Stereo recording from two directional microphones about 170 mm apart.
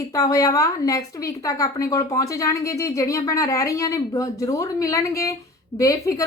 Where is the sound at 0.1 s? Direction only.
20° left (ahead or behind).